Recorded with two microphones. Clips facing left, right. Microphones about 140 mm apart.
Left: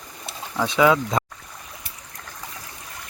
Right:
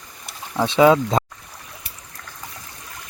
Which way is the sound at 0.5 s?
25° right (ahead or behind).